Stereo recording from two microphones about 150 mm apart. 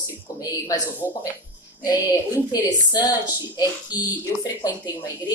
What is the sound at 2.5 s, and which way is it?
Speech, 25° left (ahead or behind).